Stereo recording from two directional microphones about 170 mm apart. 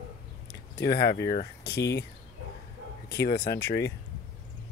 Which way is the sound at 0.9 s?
70° left (ahead or behind).